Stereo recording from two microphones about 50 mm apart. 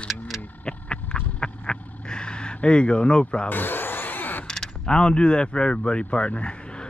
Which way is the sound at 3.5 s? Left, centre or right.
Left.